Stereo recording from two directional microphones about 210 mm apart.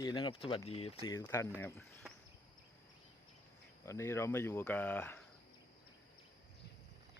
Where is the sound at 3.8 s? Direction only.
15° left (ahead or behind).